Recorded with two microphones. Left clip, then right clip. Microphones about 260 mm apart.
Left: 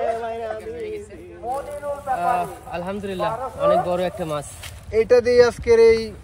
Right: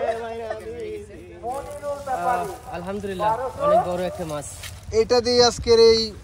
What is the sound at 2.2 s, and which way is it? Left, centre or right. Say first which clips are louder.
Speech: left 2 dB; left.